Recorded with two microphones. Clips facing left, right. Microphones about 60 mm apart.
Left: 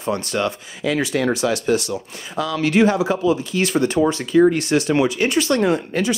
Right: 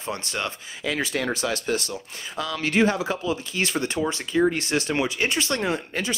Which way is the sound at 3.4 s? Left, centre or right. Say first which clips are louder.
Left 6 dB; right.